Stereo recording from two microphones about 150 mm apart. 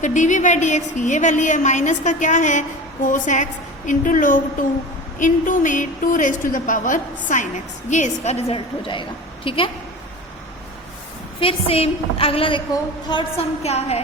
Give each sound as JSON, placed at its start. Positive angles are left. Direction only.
{"t": 0.0, "sound": "a woman's voice", "side_deg": 55}
{"t": 11.3, "sound": "a woman's voice", "side_deg": 40}